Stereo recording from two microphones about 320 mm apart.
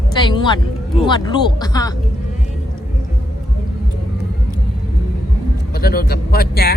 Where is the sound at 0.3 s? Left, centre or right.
Centre.